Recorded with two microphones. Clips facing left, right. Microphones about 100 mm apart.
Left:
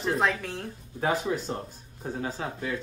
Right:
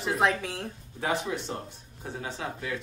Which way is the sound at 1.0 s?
35° left (ahead or behind).